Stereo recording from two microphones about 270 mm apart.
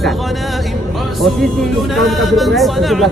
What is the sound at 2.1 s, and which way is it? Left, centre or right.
Music, centre.